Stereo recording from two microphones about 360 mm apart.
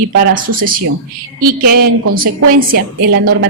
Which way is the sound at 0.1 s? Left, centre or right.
Right.